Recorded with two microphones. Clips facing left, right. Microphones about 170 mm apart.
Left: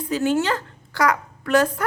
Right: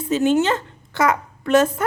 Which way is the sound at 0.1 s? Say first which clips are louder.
Right 4 dB; 20° right (ahead or behind).